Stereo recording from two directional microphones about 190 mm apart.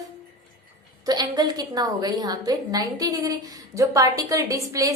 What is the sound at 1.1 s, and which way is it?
A woman's voice, 20° right (ahead or behind).